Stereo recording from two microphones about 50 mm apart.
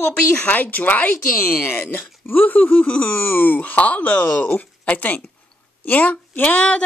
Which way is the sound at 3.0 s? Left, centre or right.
Left.